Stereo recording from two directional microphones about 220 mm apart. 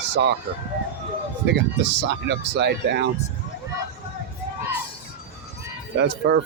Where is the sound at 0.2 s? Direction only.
55° right (ahead or behind).